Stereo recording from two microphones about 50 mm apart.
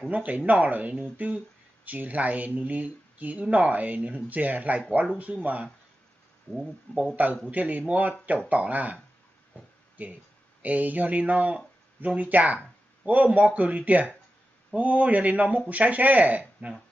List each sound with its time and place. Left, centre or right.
0.1 s speech: right
6.5 s speech: centre
7.5 s speech: right
10.0 s speech: right